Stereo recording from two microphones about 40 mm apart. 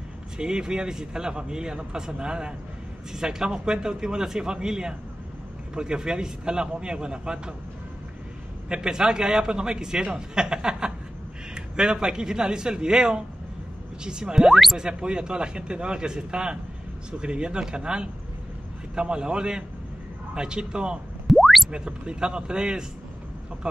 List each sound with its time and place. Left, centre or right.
0.4 s a man's voice: centre
8.6 s a man's voice: right
21.3 s a sound: centre
21.6 s a man's voice: right